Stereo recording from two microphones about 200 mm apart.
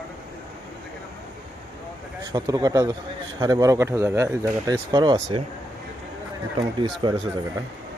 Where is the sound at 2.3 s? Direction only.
20° right (ahead or behind).